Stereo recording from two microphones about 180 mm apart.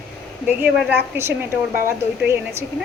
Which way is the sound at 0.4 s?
10° right (ahead or behind).